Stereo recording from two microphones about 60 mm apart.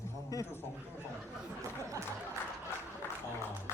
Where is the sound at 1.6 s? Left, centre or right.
Right.